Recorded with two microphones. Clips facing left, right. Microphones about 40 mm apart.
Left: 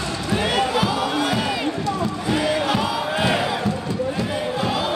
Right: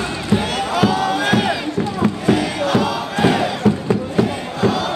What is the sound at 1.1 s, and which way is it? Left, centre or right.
Crowd, right.